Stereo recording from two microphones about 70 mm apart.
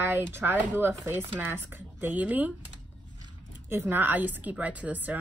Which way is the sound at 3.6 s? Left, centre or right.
Right.